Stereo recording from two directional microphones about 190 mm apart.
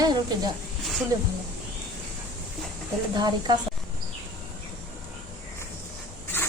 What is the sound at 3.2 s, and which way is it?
Speech, 20° right (ahead or behind).